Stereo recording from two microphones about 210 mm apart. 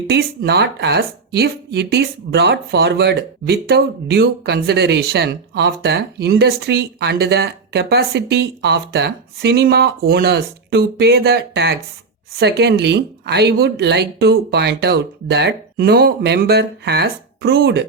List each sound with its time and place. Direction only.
0.1 s speech: 50° right (ahead or behind)